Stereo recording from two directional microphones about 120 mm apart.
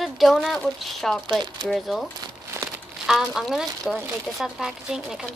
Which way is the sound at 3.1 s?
Centre (ahead or behind).